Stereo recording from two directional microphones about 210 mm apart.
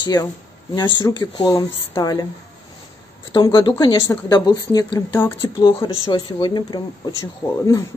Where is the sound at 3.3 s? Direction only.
25° left (ahead or behind).